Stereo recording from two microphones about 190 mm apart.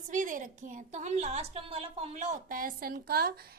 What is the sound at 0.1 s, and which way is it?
A woman's voice, 45° right (ahead or behind).